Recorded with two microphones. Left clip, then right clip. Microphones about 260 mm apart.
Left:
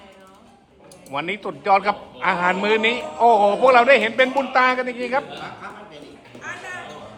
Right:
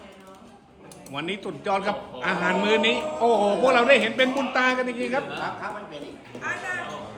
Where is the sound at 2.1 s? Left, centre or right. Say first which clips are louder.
Left 4 dB; centre.